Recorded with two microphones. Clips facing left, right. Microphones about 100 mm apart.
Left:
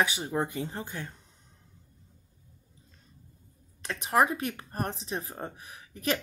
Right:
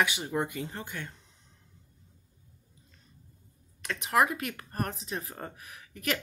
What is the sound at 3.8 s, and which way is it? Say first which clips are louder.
Speech: left 1 dB; 30° left (ahead or behind).